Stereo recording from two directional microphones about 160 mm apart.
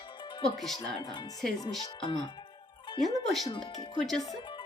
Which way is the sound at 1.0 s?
25° left (ahead or behind).